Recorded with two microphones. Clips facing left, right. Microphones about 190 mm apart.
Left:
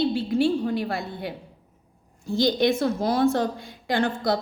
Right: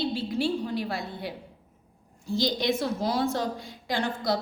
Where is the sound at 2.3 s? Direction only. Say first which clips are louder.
Left 5 dB; 55° left (ahead or behind).